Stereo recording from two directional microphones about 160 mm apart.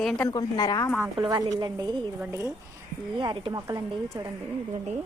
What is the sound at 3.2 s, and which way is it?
Speech, 30° right (ahead or behind).